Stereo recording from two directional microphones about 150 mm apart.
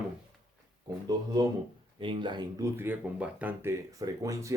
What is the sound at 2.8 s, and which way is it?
Speech, 10° right (ahead or behind).